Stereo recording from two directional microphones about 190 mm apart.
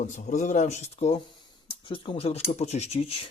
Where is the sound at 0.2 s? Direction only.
40° left (ahead or behind).